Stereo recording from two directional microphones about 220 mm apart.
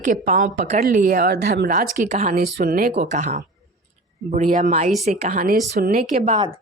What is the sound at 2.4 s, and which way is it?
Speech, 45° right (ahead or behind).